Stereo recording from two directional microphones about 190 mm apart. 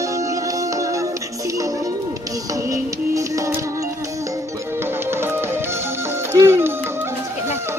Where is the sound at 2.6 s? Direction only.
15° right (ahead or behind).